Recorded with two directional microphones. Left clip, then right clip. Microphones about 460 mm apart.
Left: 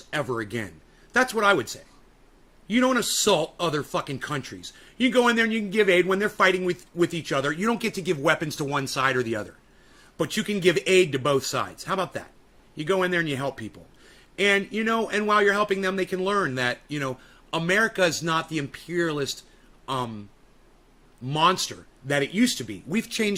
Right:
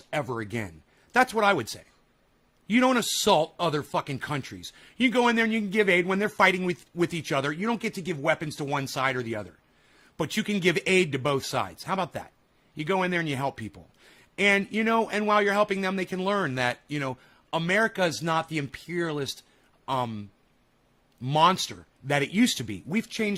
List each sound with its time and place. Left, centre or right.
0.1 s speech: centre
21.2 s speech: right